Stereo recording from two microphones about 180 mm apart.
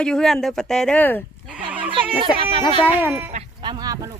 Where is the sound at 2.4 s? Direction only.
30° right (ahead or behind).